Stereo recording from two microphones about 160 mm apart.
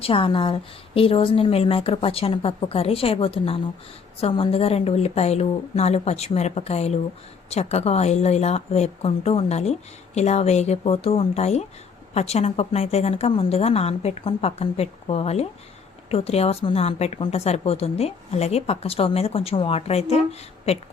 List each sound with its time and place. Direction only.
0.0 s a woman's voice: 35° left (ahead or behind)